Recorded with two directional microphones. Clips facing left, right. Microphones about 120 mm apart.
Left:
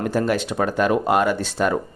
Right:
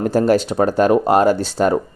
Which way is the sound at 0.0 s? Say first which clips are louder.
Right 6 dB; 35° right (ahead or behind).